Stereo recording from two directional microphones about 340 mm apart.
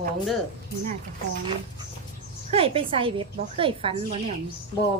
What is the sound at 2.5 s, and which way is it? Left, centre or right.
A woman's voice, centre.